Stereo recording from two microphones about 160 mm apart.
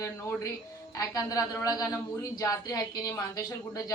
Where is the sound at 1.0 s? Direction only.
20° left (ahead or behind).